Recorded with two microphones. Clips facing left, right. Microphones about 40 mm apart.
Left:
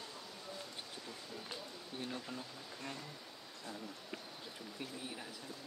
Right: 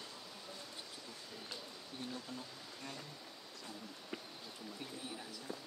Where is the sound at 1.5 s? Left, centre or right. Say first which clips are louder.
Left 2 dB; left.